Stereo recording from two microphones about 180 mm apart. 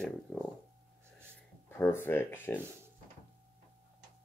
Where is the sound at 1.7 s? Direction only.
15° left (ahead or behind).